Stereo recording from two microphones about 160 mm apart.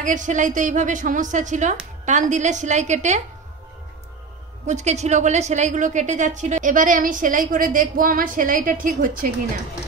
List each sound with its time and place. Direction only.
0.0 s a woman's voice: 50° right (ahead or behind)
4.6 s a woman's voice: 45° right (ahead or behind)